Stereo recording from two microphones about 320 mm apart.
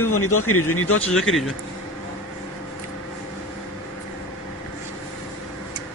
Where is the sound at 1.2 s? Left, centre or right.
Centre.